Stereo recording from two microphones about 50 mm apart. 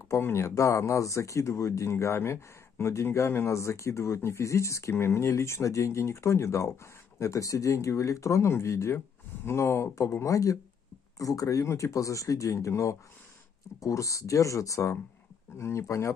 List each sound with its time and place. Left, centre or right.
0.2 s speech: left
0.6 s speech: left
4.9 s speech: left
15.5 s speech: left